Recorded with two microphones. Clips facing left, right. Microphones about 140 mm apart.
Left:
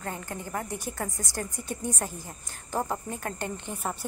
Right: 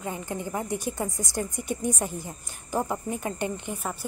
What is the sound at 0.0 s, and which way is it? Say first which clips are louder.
Speech: right 4 dB; 15° right (ahead or behind).